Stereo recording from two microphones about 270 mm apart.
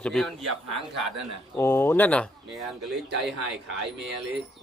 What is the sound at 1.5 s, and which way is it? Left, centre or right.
Speech, centre.